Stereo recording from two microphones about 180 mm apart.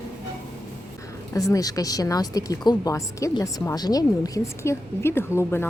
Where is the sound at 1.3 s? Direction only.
20° left (ahead or behind).